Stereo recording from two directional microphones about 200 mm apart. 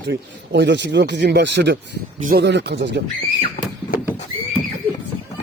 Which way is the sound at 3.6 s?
50° left (ahead or behind).